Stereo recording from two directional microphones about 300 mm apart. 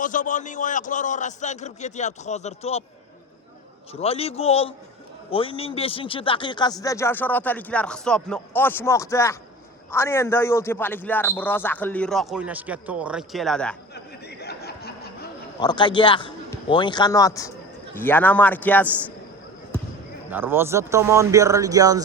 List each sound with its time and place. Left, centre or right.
0.0 s a man's voice: left
3.9 s a man's voice: centre
13.9 s a sound: left
15.6 s a man's voice: centre
20.3 s speech: centre